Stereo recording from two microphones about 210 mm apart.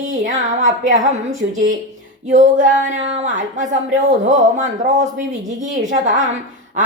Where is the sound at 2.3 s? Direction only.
35° right (ahead or behind).